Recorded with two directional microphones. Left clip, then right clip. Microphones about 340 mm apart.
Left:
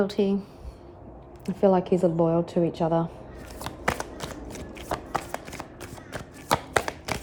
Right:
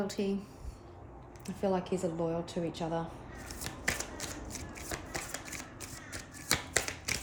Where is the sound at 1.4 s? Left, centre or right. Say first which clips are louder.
Left 11 dB; left.